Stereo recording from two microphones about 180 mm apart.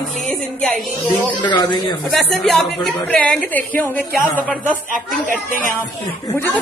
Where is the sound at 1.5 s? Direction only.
25° left (ahead or behind).